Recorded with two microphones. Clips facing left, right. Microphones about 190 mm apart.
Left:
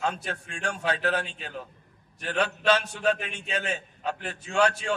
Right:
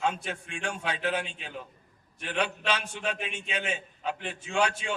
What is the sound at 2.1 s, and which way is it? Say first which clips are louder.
Speech: left 3 dB; 40° left (ahead or behind).